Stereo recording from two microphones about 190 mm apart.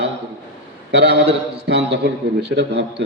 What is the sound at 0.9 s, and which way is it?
A man's voice, 65° right (ahead or behind).